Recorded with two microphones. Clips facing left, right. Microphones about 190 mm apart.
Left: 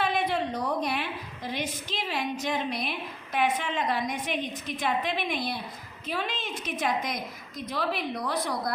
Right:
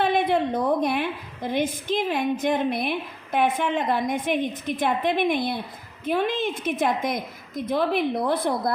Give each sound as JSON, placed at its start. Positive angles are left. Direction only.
{"t": 0.0, "sound": "a woman's voice", "side_deg": -55}